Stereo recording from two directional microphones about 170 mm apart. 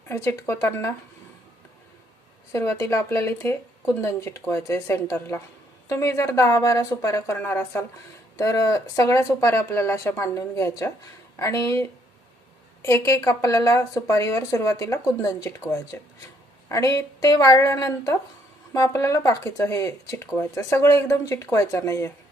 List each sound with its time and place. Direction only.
0.1 s speech: 15° left (ahead or behind)
2.5 s speech: 15° left (ahead or behind)